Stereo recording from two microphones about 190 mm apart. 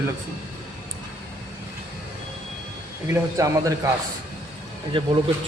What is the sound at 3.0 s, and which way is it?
Speech, 15° right (ahead or behind).